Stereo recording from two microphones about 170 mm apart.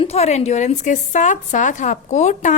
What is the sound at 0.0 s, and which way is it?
A woman's voice, 40° left (ahead or behind).